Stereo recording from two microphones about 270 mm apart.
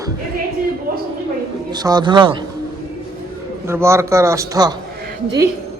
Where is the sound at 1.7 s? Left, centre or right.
Centre.